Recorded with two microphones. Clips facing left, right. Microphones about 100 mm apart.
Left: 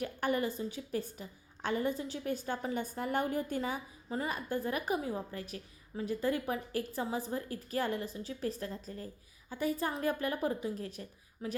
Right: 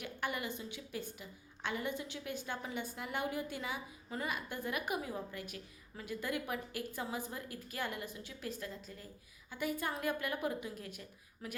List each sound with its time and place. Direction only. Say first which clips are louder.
0.0 s a woman's voice: left 7 dB; 40° left (ahead or behind)
4.1 s a woman's voice: left 5 dB; 35° left (ahead or behind)
11.4 s a woman's voice: left 7 dB; 25° left (ahead or behind)